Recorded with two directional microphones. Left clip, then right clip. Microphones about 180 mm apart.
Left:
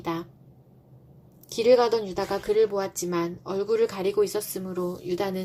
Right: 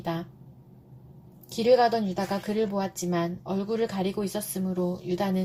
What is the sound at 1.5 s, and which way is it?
A woman's voice, 40° left (ahead or behind).